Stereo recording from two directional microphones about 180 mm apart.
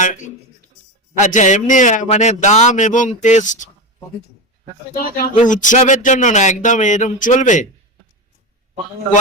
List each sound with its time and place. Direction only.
1.2 s speech: 45° left (ahead or behind)
4.9 s speech: 55° left (ahead or behind)
5.5 s speech: 45° left (ahead or behind)